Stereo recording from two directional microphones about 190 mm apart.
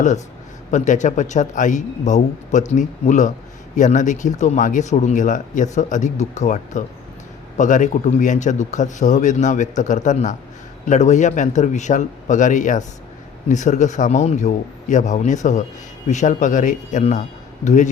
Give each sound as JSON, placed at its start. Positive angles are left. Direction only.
{"t": 0.7, "sound": "speech", "side_deg": 40}